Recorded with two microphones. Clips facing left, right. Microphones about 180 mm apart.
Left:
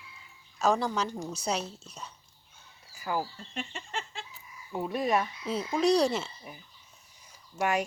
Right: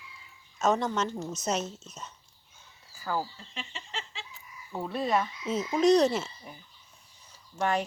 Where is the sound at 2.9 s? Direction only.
10° left (ahead or behind).